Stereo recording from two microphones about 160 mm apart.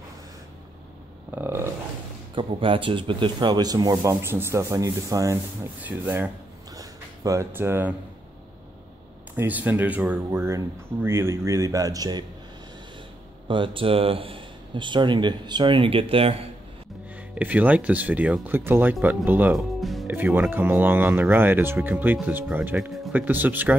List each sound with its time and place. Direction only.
1.3 s speech: 15° right (ahead or behind)
2.3 s speech: 30° right (ahead or behind); by 6.3 s 10° right (ahead or behind)
6.8 s a sound: 20° right (ahead or behind)
9.3 s speech: 10° right (ahead or behind)
13.5 s speech: 30° right (ahead or behind)
17.4 s speech: 10° right (ahead or behind)
19.5 s music: centre (ahead or behind)
20.3 s speech: 15° right (ahead or behind)